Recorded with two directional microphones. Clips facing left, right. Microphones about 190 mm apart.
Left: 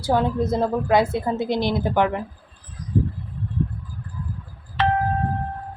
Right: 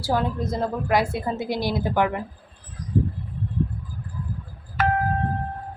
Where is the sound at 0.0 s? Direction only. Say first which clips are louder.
Left 4 dB; 20° left (ahead or behind).